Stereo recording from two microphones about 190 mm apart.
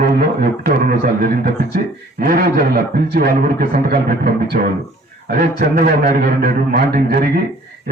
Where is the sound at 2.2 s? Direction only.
50° right (ahead or behind).